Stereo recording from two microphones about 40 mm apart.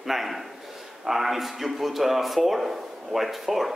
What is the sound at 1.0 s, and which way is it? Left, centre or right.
A man's voice, centre.